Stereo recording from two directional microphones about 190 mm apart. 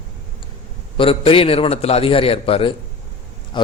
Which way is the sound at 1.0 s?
30° left (ahead or behind).